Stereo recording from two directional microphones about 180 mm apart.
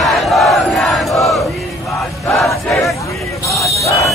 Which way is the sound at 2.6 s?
Centre (ahead or behind).